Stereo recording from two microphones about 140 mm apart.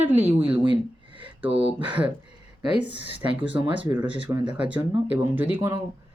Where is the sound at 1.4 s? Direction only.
40° right (ahead or behind).